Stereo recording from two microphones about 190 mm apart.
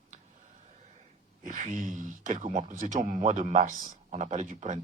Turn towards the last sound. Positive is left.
turn(degrees=-40)  # may be behind; listen again after turning